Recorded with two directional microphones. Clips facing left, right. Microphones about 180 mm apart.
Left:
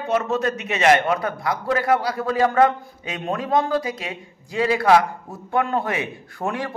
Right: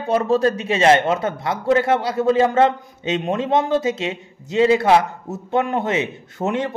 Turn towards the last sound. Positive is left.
turn(degrees=-20)  # may be behind; listen again after turning